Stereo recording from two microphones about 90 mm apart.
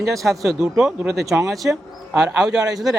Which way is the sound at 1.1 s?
35° right (ahead or behind).